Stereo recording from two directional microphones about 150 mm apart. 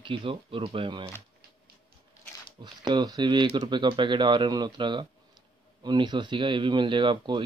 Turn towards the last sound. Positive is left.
turn(degrees=-35)  # may be behind; listen again after turning